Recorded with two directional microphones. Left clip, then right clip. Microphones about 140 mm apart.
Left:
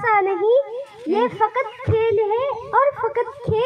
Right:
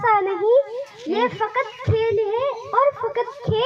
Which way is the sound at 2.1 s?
40° right (ahead or behind).